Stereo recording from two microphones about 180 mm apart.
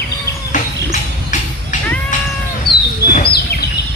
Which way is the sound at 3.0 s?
60° left (ahead or behind).